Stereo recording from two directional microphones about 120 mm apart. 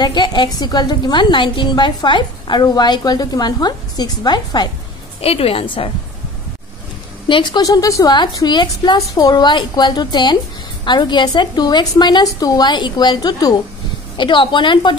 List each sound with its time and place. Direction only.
0.0 s a woman's voice: 40° left (ahead or behind)
5.2 s a woman's voice: 55° left (ahead or behind)
7.2 s a woman's voice: 40° left (ahead or behind)